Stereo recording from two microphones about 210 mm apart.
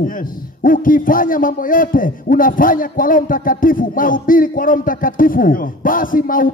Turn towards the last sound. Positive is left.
turn(degrees=40)  # may be behind; listen again after turning